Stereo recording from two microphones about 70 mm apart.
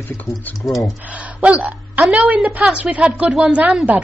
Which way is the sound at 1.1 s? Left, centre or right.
Centre.